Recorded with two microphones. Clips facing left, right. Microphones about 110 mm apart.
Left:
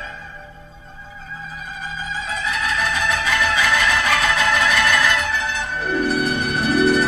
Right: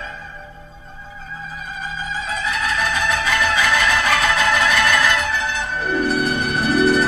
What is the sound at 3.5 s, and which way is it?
Music, 5° right (ahead or behind).